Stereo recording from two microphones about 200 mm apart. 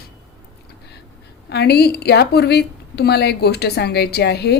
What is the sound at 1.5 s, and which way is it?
Speech, 55° left (ahead or behind).